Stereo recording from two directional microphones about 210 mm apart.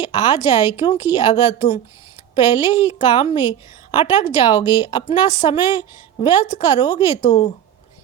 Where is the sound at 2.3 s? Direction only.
20° left (ahead or behind).